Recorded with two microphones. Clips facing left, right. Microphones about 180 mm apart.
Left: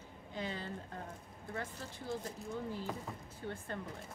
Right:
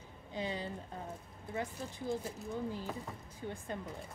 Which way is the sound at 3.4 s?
15° right (ahead or behind).